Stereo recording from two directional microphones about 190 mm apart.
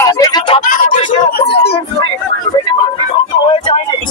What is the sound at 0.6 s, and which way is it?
Speech, 45° left (ahead or behind).